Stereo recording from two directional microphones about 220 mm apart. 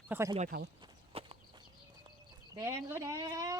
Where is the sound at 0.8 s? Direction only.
25° right (ahead or behind).